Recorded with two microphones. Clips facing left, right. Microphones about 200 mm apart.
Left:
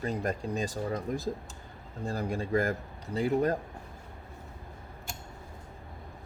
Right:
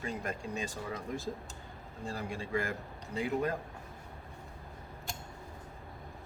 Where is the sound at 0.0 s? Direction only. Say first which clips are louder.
Left 6 dB; 40° left (ahead or behind).